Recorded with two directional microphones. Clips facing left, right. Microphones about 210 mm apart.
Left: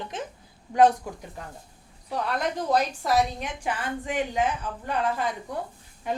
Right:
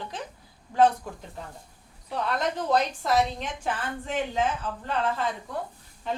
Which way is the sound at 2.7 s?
10° left (ahead or behind).